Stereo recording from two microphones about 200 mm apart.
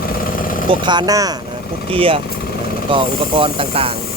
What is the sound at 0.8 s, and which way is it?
Speech, 20° right (ahead or behind).